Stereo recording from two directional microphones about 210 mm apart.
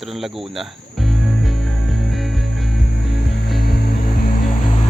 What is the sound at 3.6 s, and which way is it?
Music, 50° left (ahead or behind).